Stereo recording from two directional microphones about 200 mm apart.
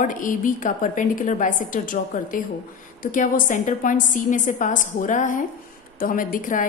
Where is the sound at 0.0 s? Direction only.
40° left (ahead or behind).